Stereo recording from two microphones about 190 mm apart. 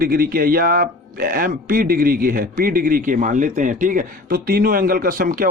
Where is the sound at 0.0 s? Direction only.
50° right (ahead or behind).